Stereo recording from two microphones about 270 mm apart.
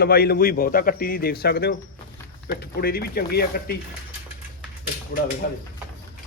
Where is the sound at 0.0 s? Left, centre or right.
Left.